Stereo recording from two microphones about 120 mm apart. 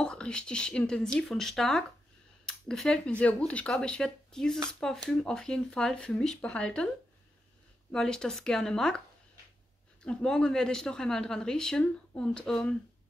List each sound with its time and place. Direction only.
0.0 s speech: 10° left (ahead or behind)
7.9 s speech: 5° left (ahead or behind)
10.0 s speech: 5° left (ahead or behind)